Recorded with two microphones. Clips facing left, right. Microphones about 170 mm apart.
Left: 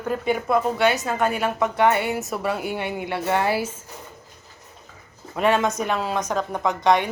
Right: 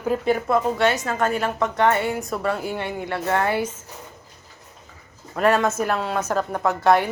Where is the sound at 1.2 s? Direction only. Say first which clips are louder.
Even; 15° left (ahead or behind).